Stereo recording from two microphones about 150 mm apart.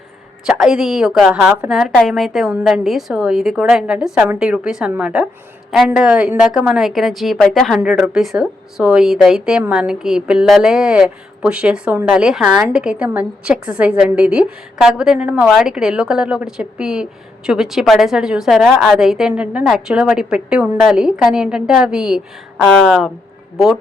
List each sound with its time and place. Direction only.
0.4 s a woman's voice: 5° right (ahead or behind)